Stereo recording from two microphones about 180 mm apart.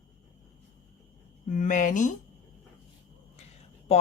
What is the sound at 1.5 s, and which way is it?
Speech, 45° left (ahead or behind).